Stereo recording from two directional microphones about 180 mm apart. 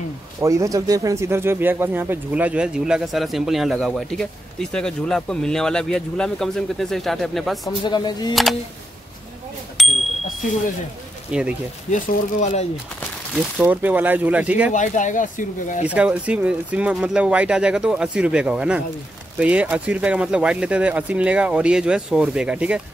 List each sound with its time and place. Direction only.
0.4 s speech: 15° right (ahead or behind); by 7.5 s centre (ahead or behind)
7.6 s speech: 25° left (ahead or behind)
9.8 s bicycle bell: centre (ahead or behind)
11.3 s speech: 5° right (ahead or behind)
11.9 s speech: 40° left (ahead or behind)
13.3 s speech: 5° right (ahead or behind)
14.7 s speech: 45° left (ahead or behind)
15.9 s speech: 5° right (ahead or behind)